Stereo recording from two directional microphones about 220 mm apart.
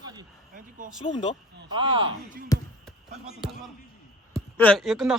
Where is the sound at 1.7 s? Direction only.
20° right (ahead or behind).